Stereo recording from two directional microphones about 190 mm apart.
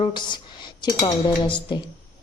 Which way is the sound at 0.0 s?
25° left (ahead or behind).